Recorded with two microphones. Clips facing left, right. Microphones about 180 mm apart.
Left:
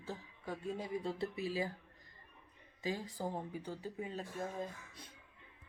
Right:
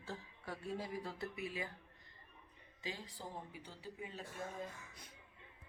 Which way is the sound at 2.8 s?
45° left (ahead or behind).